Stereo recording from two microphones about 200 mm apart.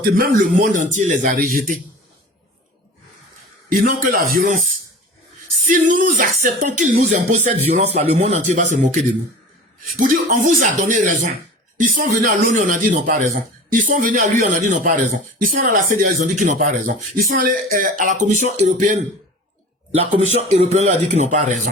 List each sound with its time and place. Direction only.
0.0 s speech: 45° right (ahead or behind)
3.7 s speech: 45° right (ahead or behind)
5.6 s speech: 40° right (ahead or behind)
10.0 s speech: 40° right (ahead or behind)